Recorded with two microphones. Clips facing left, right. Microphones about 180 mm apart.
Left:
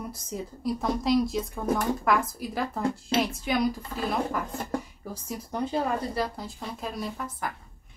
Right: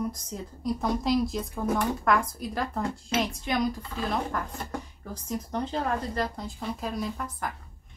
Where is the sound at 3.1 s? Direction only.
30° left (ahead or behind).